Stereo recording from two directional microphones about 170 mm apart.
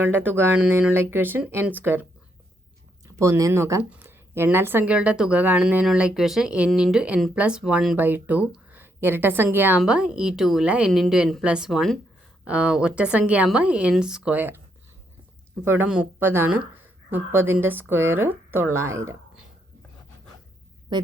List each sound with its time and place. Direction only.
0.0 s speech: 10° right (ahead or behind)
3.1 s speech: 20° right (ahead or behind)
15.6 s speech: 10° right (ahead or behind)
20.9 s a sound: 25° right (ahead or behind)